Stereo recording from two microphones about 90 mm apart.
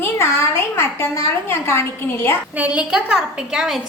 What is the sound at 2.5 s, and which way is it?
A woman's voice, 15° right (ahead or behind).